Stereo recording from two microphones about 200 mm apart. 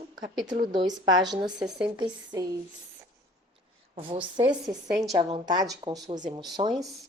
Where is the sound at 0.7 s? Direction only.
20° right (ahead or behind).